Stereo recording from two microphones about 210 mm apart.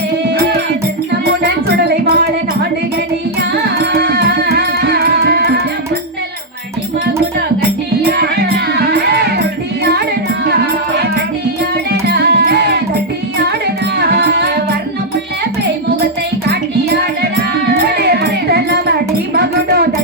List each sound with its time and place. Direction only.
1.2 s music: 45° right (ahead or behind)
3.9 s music: 45° right (ahead or behind)
8.9 s music: 50° right (ahead or behind)
11.9 s music: 50° right (ahead or behind)
14.0 s music: 50° right (ahead or behind)
17.7 s music: 45° right (ahead or behind)